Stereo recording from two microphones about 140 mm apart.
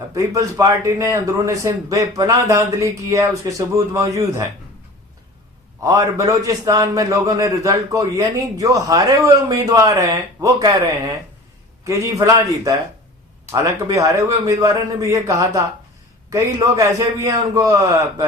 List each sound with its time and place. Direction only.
0.1 s a man's voice: 20° right (ahead or behind)
5.8 s a man's voice: 25° right (ahead or behind)